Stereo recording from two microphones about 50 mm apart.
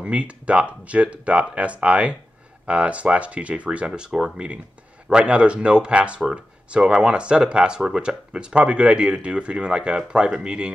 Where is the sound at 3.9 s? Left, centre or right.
Centre.